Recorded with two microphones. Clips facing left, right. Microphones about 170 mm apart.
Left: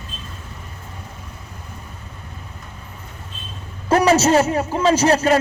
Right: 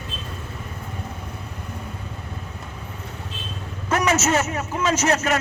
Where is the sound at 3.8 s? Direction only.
30° left (ahead or behind).